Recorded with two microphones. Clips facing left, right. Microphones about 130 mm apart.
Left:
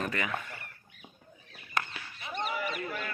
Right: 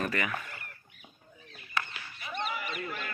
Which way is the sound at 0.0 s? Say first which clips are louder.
Right 1 dB; 20° left (ahead or behind).